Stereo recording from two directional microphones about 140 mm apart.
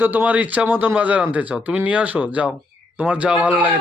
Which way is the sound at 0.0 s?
15° right (ahead or behind).